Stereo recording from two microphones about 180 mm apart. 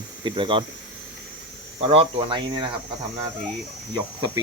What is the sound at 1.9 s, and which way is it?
Cricket, 30° right (ahead or behind).